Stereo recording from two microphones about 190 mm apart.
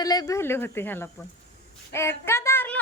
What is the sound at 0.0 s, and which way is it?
Speech, 20° left (ahead or behind).